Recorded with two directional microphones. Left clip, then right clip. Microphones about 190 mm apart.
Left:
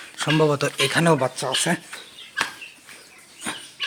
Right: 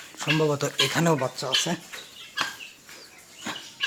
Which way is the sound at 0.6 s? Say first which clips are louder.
Left 3 dB; 10° left (ahead or behind).